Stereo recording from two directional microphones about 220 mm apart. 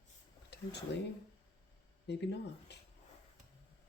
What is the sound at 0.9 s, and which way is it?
Speech, 50° left (ahead or behind).